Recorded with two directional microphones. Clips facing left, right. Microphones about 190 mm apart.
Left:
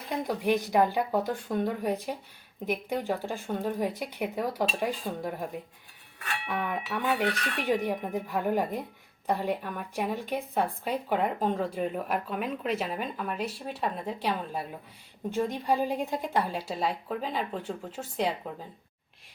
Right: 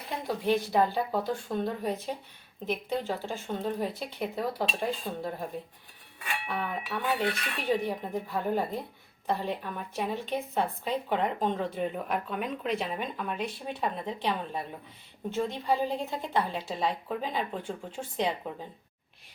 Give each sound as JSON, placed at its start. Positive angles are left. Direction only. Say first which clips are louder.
{"t": 0.3, "sound": "a woman's voice", "louder": "right 1 dB", "side_deg": 15}